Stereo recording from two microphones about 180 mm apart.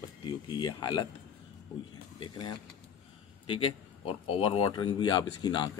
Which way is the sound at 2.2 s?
25° left (ahead or behind).